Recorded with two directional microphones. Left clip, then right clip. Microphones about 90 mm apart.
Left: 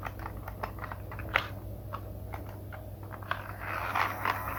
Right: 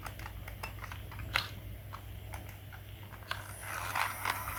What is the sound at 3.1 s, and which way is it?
Biting, 20° right (ahead or behind).